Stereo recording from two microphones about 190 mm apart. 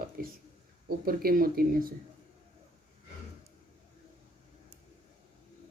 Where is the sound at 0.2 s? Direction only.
50° right (ahead or behind).